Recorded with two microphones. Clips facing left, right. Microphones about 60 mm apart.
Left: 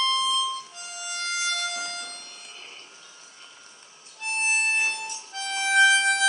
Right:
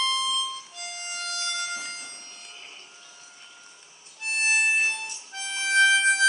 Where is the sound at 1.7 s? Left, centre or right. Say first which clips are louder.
Left 2 dB; centre.